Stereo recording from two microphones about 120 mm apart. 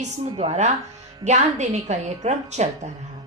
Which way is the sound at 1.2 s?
70° right (ahead or behind).